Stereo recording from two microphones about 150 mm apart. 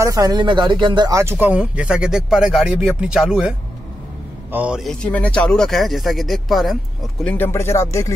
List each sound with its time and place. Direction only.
0.0 s speech: 25° right (ahead or behind); by 4.9 s 5° right (ahead or behind)
5.0 s speech: 10° left (ahead or behind)
7.2 s speech: 15° left (ahead or behind)